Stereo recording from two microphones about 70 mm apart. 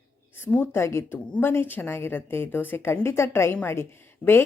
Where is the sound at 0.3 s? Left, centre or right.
Left.